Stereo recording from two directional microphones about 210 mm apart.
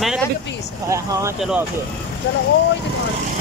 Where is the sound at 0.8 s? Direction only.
15° right (ahead or behind).